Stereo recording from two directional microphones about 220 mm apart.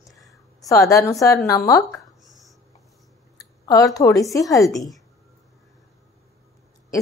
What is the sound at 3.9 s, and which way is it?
Speech, 15° left (ahead or behind).